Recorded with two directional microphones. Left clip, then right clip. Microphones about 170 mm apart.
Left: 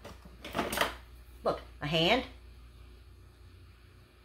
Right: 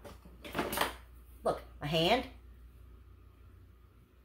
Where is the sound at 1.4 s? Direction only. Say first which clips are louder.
Left 1 dB; 5° right (ahead or behind).